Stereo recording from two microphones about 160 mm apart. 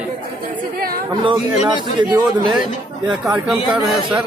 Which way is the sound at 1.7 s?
30° right (ahead or behind).